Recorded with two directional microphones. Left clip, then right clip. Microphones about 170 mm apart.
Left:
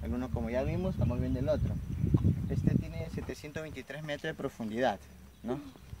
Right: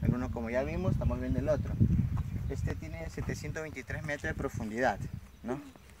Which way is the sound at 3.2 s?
20° left (ahead or behind).